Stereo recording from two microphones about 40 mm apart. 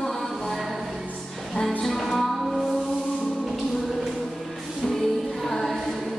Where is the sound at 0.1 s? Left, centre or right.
Centre.